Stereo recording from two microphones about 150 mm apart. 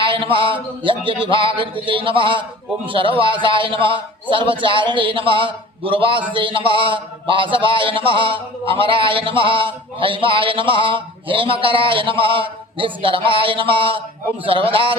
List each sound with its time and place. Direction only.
0.0 s a man's voice: 35° right (ahead or behind)